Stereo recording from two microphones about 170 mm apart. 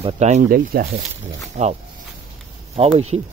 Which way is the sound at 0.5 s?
60° right (ahead or behind).